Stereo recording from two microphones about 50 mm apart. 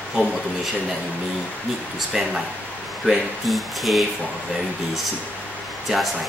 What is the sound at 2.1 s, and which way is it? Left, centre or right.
Speech, centre.